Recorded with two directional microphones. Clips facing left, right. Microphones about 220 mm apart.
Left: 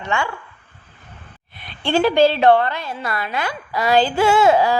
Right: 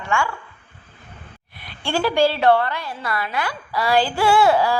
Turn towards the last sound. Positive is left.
turn(degrees=20)  # may be behind; listen again after turning